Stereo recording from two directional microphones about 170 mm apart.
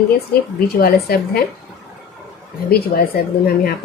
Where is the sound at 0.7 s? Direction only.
65° left (ahead or behind).